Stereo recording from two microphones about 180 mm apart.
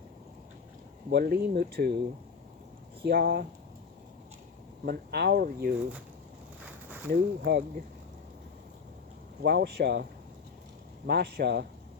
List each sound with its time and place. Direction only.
1.1 s speech: 60° right (ahead or behind)
3.0 s speech: 60° right (ahead or behind)
4.9 s speech: 65° right (ahead or behind)
6.6 s a sound: 10° right (ahead or behind)
7.1 s speech: 60° right (ahead or behind)
9.4 s speech: 65° right (ahead or behind)